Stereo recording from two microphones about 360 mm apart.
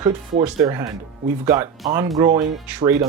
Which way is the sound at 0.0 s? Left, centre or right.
Centre.